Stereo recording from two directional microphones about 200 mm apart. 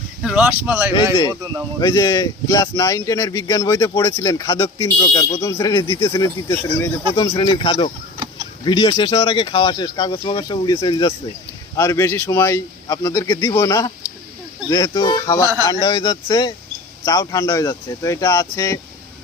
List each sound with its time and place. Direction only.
0.2 s speech: 5° right (ahead or behind)
1.8 s speech: 20° left (ahead or behind)
7.2 s speech: 20° left (ahead or behind)